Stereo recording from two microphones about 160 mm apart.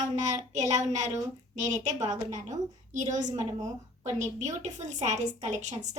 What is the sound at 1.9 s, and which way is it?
Speech, 20° right (ahead or behind).